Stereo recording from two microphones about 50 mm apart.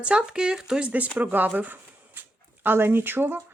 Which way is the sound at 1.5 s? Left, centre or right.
Right.